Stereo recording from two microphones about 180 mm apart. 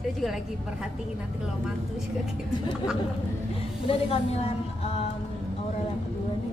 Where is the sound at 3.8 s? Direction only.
35° left (ahead or behind).